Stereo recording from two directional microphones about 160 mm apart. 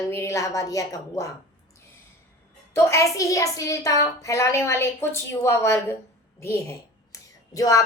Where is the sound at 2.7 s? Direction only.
20° left (ahead or behind).